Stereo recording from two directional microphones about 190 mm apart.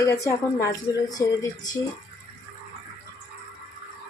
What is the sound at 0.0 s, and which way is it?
Speech, 15° left (ahead or behind).